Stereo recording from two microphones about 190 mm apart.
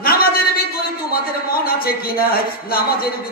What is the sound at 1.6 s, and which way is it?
Music, 50° left (ahead or behind).